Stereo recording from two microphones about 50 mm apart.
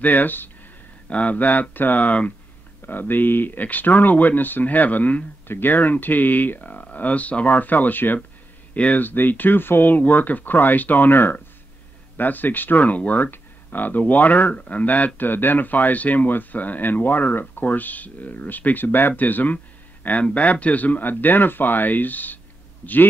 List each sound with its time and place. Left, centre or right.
0.0 s speech: left
1.0 s speech: left
2.9 s speech: left
8.7 s speech: left
9.0 s a man's voice: left